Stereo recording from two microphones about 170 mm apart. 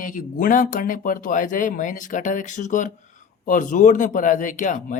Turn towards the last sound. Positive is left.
turn(degrees=50)  # may be behind; listen again after turning